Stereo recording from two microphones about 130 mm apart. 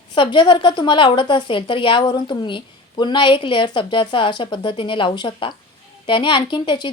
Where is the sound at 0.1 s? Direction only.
40° left (ahead or behind).